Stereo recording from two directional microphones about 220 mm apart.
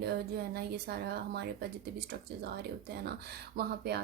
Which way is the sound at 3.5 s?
45° right (ahead or behind).